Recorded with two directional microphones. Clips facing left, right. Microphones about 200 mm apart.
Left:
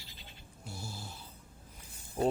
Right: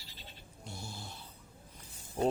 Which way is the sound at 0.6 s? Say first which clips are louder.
Left 1 dB; 5° left (ahead or behind).